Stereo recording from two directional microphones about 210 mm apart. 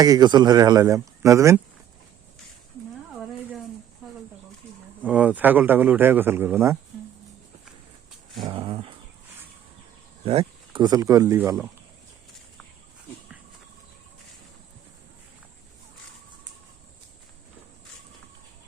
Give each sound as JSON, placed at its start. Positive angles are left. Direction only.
{"t": 0.0, "sound": "a man's voice", "side_deg": -20}
{"t": 5.0, "sound": "a man's voice", "side_deg": -5}
{"t": 8.4, "sound": "speech", "side_deg": -25}
{"t": 10.2, "sound": "speech", "side_deg": -25}